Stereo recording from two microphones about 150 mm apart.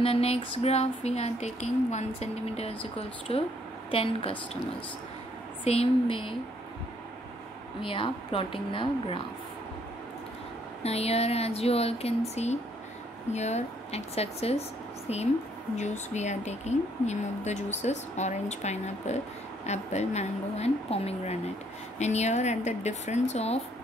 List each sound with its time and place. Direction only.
0.0 s a woman's voice: 40° left (ahead or behind)
5.6 s a woman's voice: 40° left (ahead or behind)
7.8 s a woman's voice: 35° left (ahead or behind)
10.8 s speech: 45° left (ahead or behind)
13.3 s speech: 45° left (ahead or behind)
15.7 s speech: 50° left (ahead or behind)